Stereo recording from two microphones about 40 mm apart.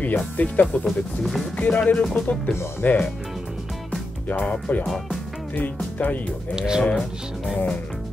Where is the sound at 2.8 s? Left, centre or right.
Left.